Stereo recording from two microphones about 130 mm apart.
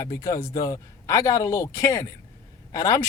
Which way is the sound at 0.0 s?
25° left (ahead or behind).